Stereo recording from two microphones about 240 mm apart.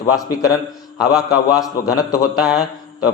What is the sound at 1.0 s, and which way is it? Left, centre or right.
A man's voice, centre.